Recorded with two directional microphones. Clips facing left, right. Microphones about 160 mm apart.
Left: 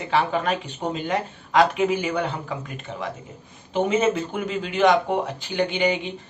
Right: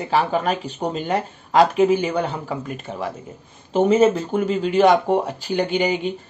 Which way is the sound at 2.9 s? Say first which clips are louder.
Right 1 dB; 40° right (ahead or behind).